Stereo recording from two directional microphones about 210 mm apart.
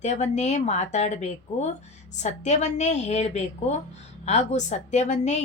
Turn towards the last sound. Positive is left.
turn(degrees=35)  # may be behind; listen again after turning